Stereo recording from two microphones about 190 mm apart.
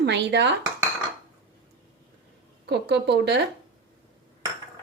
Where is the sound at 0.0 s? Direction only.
65° right (ahead or behind).